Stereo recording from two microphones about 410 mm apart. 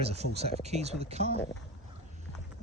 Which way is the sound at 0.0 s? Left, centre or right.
Centre.